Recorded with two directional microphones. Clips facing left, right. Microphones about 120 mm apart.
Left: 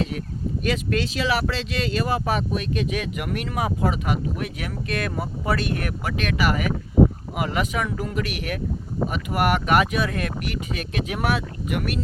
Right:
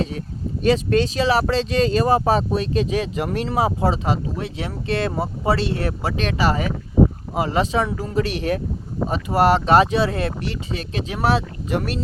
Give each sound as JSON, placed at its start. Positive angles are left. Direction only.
{"t": 0.6, "sound": "speech", "side_deg": -35}